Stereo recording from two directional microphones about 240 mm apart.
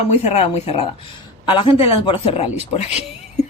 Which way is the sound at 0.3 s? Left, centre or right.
Left.